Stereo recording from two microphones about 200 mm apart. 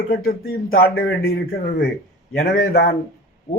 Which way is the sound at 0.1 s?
50° left (ahead or behind).